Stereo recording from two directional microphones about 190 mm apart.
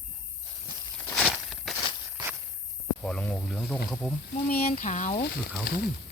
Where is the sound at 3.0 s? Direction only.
5° left (ahead or behind).